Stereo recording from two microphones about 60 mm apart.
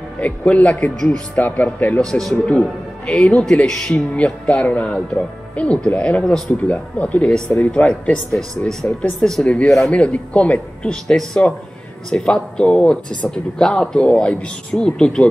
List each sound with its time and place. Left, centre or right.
0.2 s speech: left
2.0 s speech: centre; by 9.0 s left
9.4 s speech: centre